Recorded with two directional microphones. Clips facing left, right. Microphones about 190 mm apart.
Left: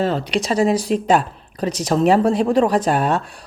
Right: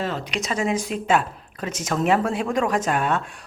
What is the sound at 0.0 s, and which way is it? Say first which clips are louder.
Speech: left 7 dB; 30° left (ahead or behind).